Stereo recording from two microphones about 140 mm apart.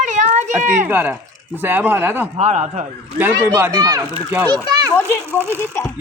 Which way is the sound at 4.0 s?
10° right (ahead or behind).